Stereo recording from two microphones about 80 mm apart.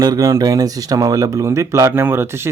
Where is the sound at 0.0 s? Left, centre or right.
Right.